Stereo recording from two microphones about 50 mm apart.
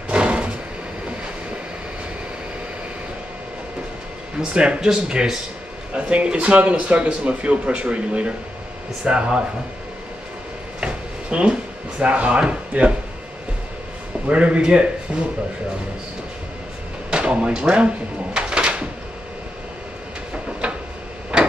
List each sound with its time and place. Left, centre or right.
0.1 s vehicle: right
4.4 s speech: centre
10.8 s drawer open or close: right
14.2 s speech: right
17.1 s speech: right
20.6 s a sound: right
21.3 s tick-tock: centre